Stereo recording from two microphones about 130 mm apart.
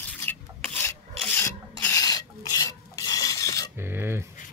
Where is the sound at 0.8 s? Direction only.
15° left (ahead or behind).